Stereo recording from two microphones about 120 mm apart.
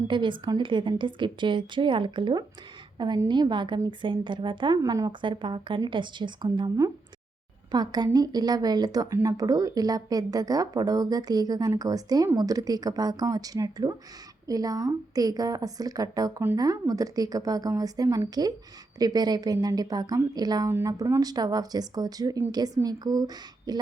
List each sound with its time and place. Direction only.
0.1 s speech: 40° right (ahead or behind)
4.8 s speech: 30° right (ahead or behind)
7.7 s speech: 35° right (ahead or behind)